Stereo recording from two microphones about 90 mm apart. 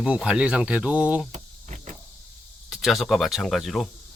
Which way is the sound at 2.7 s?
Centre (ahead or behind).